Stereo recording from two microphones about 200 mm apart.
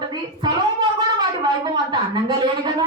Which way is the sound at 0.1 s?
20° right (ahead or behind).